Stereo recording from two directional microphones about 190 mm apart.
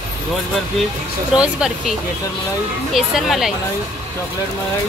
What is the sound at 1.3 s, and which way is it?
Speech, 5° right (ahead or behind).